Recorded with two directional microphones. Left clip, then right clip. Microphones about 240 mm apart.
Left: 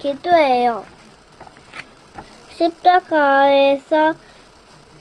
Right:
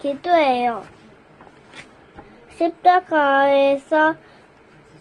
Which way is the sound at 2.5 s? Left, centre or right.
Centre.